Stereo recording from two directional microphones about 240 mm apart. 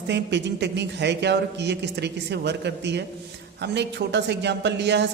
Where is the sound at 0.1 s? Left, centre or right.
Right.